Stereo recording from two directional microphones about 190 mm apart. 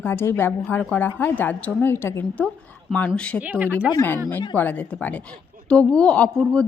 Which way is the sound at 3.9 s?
15° left (ahead or behind).